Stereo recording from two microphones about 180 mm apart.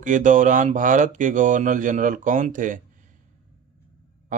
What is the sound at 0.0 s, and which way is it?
Speech, 45° right (ahead or behind).